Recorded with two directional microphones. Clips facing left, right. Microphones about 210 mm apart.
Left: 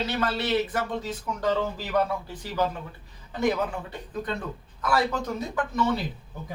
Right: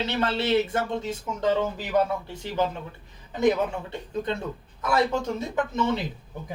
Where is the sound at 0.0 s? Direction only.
25° right (ahead or behind).